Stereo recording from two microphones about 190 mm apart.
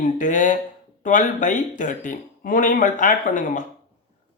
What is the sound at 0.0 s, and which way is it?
Speech, 45° left (ahead or behind).